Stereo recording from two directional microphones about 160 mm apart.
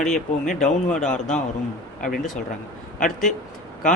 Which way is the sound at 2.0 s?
60° left (ahead or behind).